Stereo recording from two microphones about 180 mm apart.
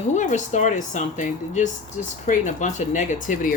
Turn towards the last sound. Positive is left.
turn(degrees=45)  # may be behind; listen again after turning